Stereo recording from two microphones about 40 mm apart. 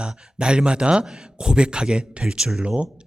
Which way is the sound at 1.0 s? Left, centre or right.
Centre.